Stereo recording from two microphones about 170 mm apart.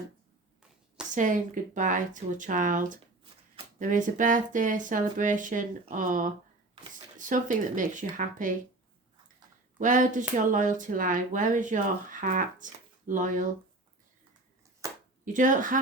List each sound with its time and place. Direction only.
1.1 s speech: 50° right (ahead or behind)
9.7 s speech: 50° right (ahead or behind)
14.8 s a sound: 20° right (ahead or behind)
15.2 s speech: 50° right (ahead or behind)